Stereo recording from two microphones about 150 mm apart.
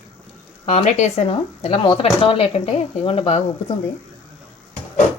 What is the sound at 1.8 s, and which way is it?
Speech, 35° left (ahead or behind).